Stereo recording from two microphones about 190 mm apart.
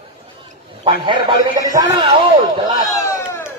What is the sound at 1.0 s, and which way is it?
A man's voice, 20° right (ahead or behind).